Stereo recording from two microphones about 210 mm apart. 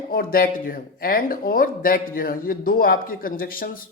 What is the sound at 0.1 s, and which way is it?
Speech, 45° left (ahead or behind).